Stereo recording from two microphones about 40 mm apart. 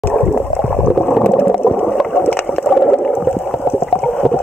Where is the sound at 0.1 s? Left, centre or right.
Centre.